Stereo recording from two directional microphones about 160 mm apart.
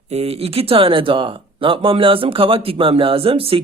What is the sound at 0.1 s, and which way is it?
Speech, 40° right (ahead or behind).